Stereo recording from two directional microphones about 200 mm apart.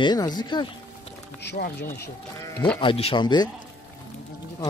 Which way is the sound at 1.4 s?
55° left (ahead or behind).